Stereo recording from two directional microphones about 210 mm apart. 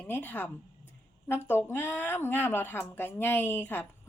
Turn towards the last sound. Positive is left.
turn(degrees=10)  # may be behind; listen again after turning